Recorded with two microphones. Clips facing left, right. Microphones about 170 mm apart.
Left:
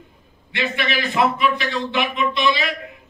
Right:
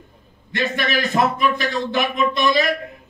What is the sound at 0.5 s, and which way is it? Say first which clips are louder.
A man's voice: right 2 dB; 45° right (ahead or behind).